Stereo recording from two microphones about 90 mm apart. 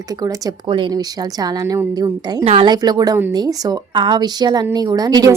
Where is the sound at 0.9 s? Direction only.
45° right (ahead or behind).